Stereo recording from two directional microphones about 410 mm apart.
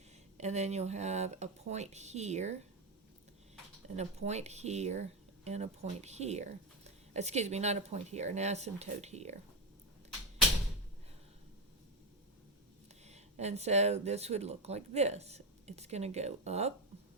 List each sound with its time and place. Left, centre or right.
0.3 s speech: centre
3.8 s speech: centre
13.1 s speech: centre